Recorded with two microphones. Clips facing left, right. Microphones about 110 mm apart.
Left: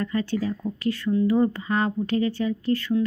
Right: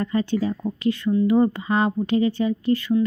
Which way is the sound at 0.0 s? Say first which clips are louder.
Right 3 dB; 20° right (ahead or behind).